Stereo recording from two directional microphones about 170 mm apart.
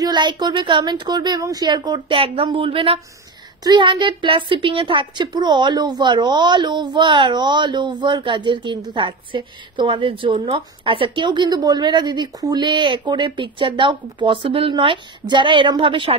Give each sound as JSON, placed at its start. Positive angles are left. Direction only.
{"t": 0.0, "sound": "a woman's voice", "side_deg": -25}